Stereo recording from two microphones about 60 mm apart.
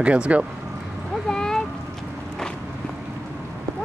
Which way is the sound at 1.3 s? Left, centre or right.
Centre.